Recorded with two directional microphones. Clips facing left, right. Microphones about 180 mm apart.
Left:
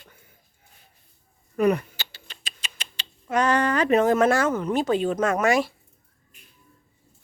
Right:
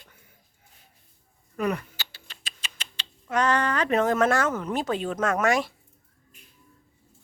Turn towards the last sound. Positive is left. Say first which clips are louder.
# left 2 dB
turn(degrees=5)  # may be behind; listen again after turning